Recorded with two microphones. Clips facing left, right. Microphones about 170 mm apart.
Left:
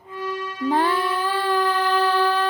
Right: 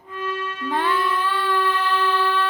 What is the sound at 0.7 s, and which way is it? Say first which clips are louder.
Music: left 1 dB; 35° left (ahead or behind).